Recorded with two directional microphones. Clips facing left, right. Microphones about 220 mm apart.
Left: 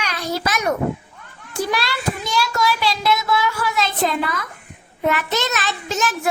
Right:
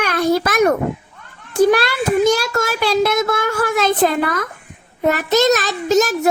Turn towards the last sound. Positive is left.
turn(degrees=-40)  # may be behind; listen again after turning